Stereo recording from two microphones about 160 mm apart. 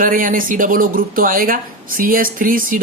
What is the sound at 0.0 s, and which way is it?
Speech, 55° right (ahead or behind).